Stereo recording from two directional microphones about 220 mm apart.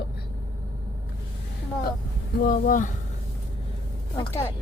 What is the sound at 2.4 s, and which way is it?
Speech, 40° left (ahead or behind).